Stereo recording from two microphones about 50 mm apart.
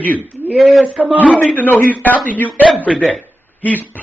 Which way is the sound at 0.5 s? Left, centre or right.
Centre.